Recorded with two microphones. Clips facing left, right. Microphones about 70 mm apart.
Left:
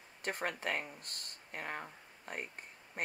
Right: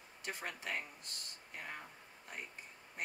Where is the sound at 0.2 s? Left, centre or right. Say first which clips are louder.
Left 6 dB; left.